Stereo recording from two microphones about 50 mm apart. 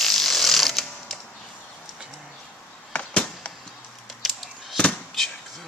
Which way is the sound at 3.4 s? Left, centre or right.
Left.